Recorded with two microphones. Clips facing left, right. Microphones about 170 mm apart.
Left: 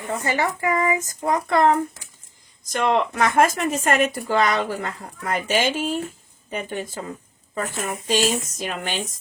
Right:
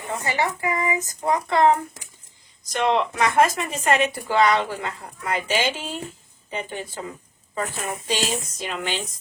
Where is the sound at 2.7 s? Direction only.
45° left (ahead or behind).